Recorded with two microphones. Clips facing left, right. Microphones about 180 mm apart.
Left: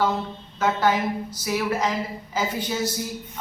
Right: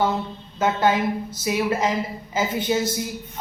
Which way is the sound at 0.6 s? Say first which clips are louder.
Right 2 dB; 25° right (ahead or behind).